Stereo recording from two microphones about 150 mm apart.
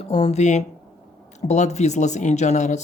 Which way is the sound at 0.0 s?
40° left (ahead or behind).